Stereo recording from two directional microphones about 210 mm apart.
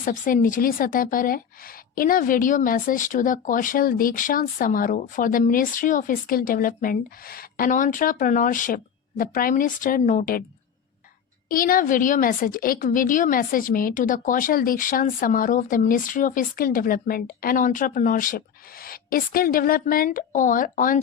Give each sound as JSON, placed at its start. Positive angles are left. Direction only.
{"t": 0.0, "sound": "a woman's voice", "side_deg": 40}
{"t": 11.4, "sound": "a woman's voice", "side_deg": 45}